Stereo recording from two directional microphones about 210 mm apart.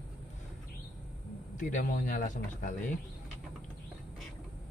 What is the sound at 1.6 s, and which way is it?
Speech, 40° left (ahead or behind).